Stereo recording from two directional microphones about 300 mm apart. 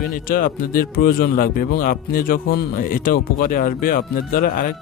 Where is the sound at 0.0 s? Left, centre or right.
Left.